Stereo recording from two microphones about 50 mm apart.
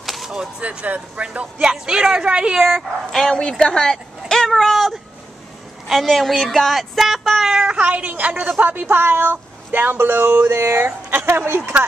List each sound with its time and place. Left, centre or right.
0.0 s a sound: centre
0.6 s a woman's voice: right
3.1 s a woman's voice: centre
7.6 s speech: right
10.5 s speech: right